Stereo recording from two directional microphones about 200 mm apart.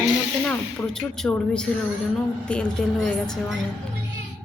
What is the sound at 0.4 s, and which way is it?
Speech, 5° left (ahead or behind).